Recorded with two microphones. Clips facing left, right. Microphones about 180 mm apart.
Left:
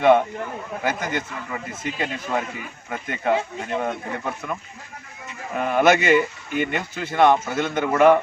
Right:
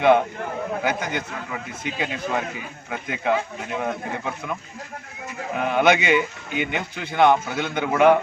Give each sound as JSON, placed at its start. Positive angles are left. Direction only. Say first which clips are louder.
{"t": 0.0, "sound": "a man's voice", "louder": "left 1 dB", "side_deg": 0}
{"t": 5.5, "sound": "a man's voice", "louder": "left 1 dB", "side_deg": 0}